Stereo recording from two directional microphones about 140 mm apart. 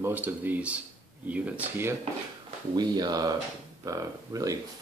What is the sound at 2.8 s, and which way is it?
Speech, 30° right (ahead or behind).